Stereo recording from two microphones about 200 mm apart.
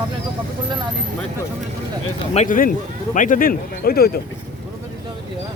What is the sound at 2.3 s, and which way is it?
A man's voice, 40° left (ahead or behind).